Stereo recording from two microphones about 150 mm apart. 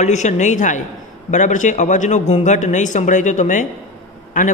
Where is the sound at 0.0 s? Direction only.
50° left (ahead or behind).